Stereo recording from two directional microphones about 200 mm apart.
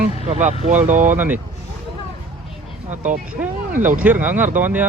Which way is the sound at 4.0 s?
10° right (ahead or behind).